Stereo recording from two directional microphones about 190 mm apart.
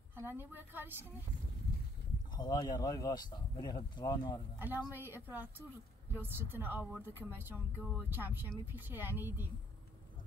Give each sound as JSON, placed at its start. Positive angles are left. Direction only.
{"t": 0.1, "sound": "speech", "side_deg": -10}
{"t": 2.3, "sound": "speech", "side_deg": 20}
{"t": 4.6, "sound": "speech", "side_deg": -10}